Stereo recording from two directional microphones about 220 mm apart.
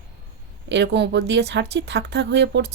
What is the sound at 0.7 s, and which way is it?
A woman's voice, 50° right (ahead or behind).